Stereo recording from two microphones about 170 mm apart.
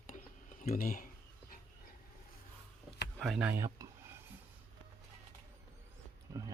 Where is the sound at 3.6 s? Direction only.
20° right (ahead or behind).